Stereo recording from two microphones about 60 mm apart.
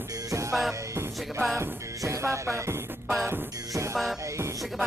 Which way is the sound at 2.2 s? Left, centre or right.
Right.